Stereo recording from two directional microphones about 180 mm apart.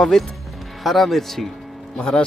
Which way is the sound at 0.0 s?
5° left (ahead or behind).